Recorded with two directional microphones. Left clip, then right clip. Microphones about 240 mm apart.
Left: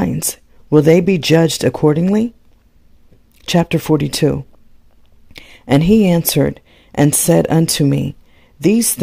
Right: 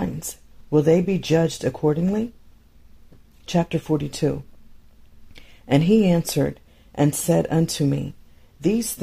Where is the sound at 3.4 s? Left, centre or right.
Left.